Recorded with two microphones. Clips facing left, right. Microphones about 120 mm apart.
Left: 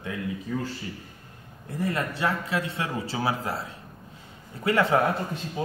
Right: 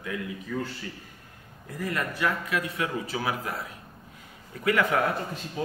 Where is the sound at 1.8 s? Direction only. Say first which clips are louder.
Left 2 dB; 30° left (ahead or behind).